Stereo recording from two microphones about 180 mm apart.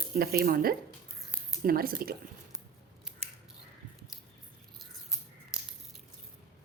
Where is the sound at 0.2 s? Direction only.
55° right (ahead or behind).